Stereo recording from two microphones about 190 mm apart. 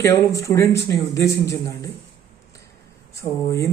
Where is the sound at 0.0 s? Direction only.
15° left (ahead or behind).